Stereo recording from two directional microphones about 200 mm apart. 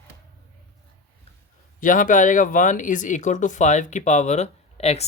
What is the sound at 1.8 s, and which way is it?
Speech, 40° left (ahead or behind).